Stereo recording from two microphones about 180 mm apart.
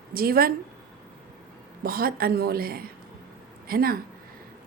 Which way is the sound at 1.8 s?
55° right (ahead or behind).